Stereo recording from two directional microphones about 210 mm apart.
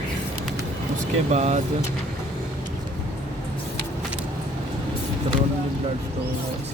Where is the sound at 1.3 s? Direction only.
30° right (ahead or behind).